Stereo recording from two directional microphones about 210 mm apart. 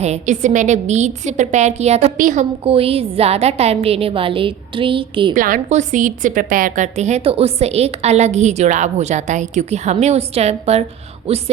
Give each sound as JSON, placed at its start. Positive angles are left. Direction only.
{"t": 0.0, "sound": "a woman's voice", "side_deg": -35}
{"t": 5.3, "sound": "a woman's voice", "side_deg": -40}